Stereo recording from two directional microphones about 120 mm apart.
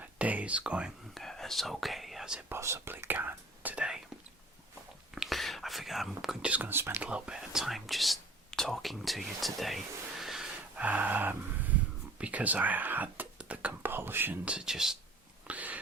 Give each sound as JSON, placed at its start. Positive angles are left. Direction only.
{"t": 0.2, "sound": "speech", "side_deg": -10}
{"t": 1.1, "sound": "speech", "side_deg": 0}
{"t": 2.5, "sound": "speech", "side_deg": -25}
{"t": 5.1, "sound": "speech", "side_deg": 0}
{"t": 15.4, "sound": "a sound", "side_deg": -15}